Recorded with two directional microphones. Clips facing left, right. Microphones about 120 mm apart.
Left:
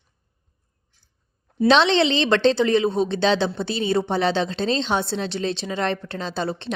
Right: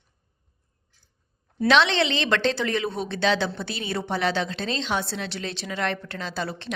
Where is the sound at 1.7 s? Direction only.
25° left (ahead or behind).